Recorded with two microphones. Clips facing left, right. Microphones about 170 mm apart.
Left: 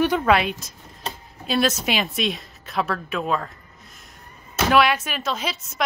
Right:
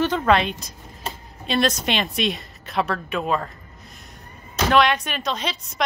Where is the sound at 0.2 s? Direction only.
5° left (ahead or behind).